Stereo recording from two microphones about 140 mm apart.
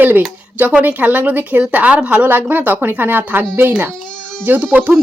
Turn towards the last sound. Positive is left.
turn(degrees=-5)  # may be behind; listen again after turning